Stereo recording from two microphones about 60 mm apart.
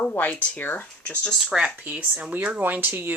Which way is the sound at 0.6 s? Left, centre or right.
Left.